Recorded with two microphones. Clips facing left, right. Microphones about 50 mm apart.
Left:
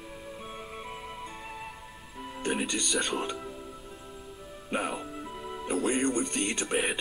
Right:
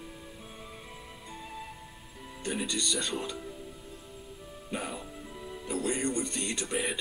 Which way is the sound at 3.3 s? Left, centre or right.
Left.